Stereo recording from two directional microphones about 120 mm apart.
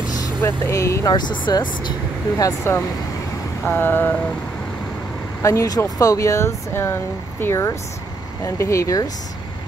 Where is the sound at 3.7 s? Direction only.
15° left (ahead or behind).